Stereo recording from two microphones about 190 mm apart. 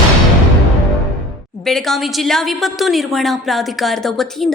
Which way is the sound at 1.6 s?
Centre (ahead or behind).